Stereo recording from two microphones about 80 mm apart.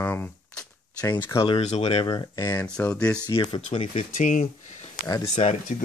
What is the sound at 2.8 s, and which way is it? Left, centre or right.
Speech, centre.